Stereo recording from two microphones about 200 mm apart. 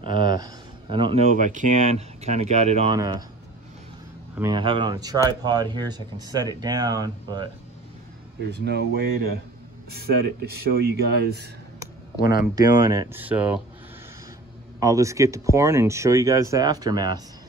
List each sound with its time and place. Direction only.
0.0 s speech: 25° right (ahead or behind)
3.0 s speech: 20° right (ahead or behind)
4.4 s speech: 20° right (ahead or behind)
8.5 s speech: 55° right (ahead or behind)
12.2 s speech: 50° left (ahead or behind)
12.5 s speech: 15° right (ahead or behind)
14.8 s speech: 15° right (ahead or behind)